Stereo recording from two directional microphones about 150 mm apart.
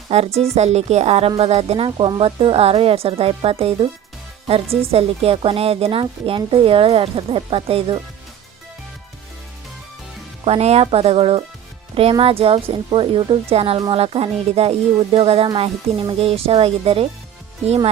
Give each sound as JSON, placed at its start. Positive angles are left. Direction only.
{"t": 0.1, "sound": "a woman's voice", "side_deg": -45}
{"t": 10.4, "sound": "a woman's voice", "side_deg": -40}